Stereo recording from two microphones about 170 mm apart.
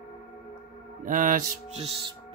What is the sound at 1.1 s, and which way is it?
Mantra, 50° right (ahead or behind).